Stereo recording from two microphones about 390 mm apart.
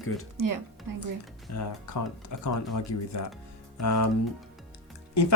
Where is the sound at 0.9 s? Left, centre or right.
Right.